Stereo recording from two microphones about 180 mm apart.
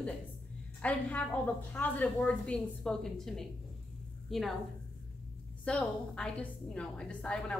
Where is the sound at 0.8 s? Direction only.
5° left (ahead or behind).